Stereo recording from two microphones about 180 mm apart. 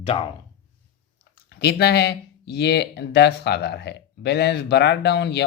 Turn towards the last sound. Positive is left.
turn(degrees=70)  # may be behind; listen again after turning